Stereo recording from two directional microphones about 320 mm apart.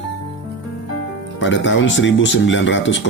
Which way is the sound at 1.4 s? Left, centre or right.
Left.